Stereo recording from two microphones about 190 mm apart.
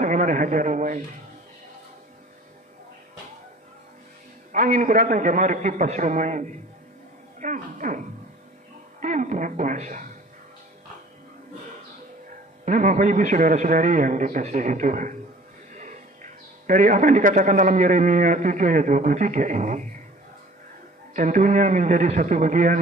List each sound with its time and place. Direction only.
0.0 s a sound: 40° right (ahead or behind)
4.5 s a man's voice: 40° right (ahead or behind)
12.6 s a man's voice: 40° right (ahead or behind)
21.1 s a man's voice: 40° right (ahead or behind)